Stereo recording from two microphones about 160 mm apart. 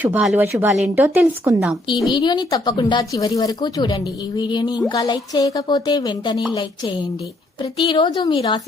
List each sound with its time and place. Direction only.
0.0 s speech: 10° right (ahead or behind)
2.1 s speech: 25° left (ahead or behind)